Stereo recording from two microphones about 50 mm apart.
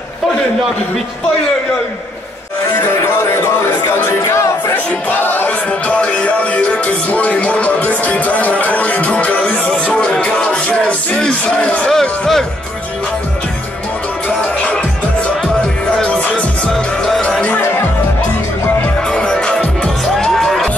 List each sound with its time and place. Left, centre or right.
3.3 s speech: left
5.1 s choir: left
5.7 s speech: left; by 12.4 s centre
16.2 s music: left
16.7 s music: centre
17.2 s music: centre
17.6 s music: left
19.0 s music: centre